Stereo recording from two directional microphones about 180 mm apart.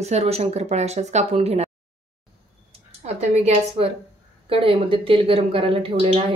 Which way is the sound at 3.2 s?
35° right (ahead or behind).